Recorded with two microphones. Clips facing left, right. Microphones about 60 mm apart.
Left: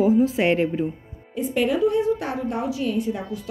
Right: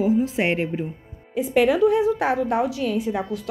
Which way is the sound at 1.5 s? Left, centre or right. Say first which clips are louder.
Right 3 dB; right.